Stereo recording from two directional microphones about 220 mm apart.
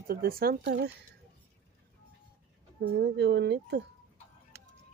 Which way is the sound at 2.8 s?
50° right (ahead or behind).